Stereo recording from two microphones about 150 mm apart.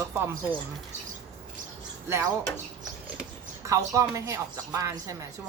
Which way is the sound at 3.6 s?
20° right (ahead or behind).